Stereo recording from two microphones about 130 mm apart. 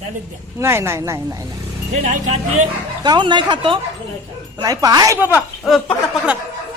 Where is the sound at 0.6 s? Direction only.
20° right (ahead or behind).